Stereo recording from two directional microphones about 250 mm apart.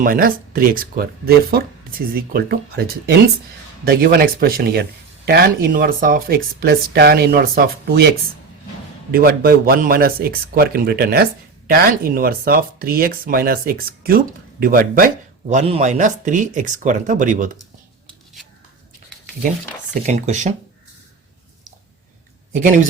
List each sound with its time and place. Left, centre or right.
0.0 s speech: right
9.1 s speech: right
19.9 s speech: right